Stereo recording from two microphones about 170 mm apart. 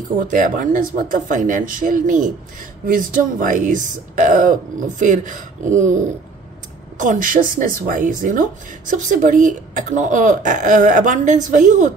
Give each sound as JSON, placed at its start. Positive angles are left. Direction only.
{"t": 0.2, "sound": "speech", "side_deg": -50}